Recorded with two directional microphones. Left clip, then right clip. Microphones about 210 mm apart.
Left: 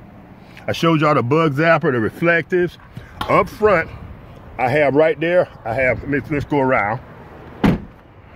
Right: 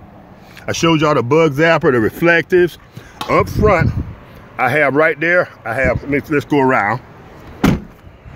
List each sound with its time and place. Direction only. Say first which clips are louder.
0.7 s speech: right 2 dB; centre (ahead or behind)
1.8 s speech: right 5 dB; 15° right (ahead or behind)
3.2 s speech: right 1 dB; centre (ahead or behind)